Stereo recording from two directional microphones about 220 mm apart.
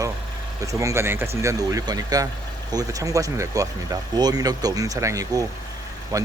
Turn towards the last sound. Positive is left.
turn(degrees=-15)  # may be behind; listen again after turning